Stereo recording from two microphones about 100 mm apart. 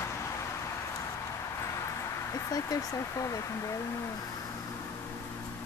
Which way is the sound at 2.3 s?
35° left (ahead or behind).